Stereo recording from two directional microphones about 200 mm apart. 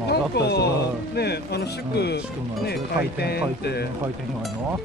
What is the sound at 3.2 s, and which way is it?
Speech, 55° left (ahead or behind).